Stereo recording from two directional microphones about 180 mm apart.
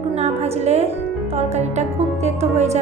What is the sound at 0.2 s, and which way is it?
Music, 35° right (ahead or behind).